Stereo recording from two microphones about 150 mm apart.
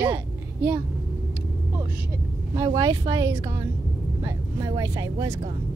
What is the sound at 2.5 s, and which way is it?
Speech, 25° right (ahead or behind).